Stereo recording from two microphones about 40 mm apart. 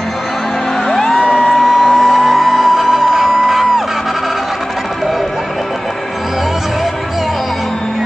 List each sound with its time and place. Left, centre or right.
0.8 s music: centre
1.5 s music: centre
2.9 s music: centre